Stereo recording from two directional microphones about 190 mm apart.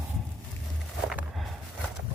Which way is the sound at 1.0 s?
5° right (ahead or behind).